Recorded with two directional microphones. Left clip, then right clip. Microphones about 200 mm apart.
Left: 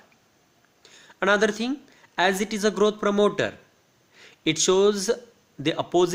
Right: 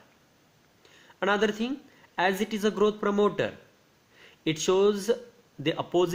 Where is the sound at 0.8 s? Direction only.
40° left (ahead or behind).